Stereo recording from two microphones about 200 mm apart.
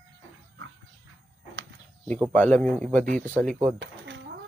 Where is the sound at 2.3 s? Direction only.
10° left (ahead or behind).